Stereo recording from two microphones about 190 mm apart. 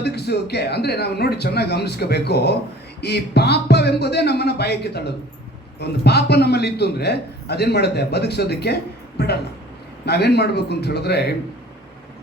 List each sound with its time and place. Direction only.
0.0 s a man's voice: 60° left (ahead or behind)